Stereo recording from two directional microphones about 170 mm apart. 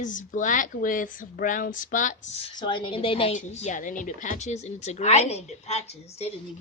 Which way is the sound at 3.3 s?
45° left (ahead or behind).